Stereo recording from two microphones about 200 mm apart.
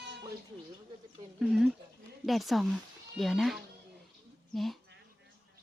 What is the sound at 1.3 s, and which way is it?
A woman's voice, centre (ahead or behind).